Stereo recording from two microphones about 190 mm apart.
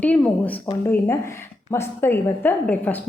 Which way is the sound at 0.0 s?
10° left (ahead or behind).